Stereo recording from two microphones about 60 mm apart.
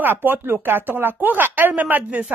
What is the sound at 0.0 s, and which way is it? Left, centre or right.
Speech, right.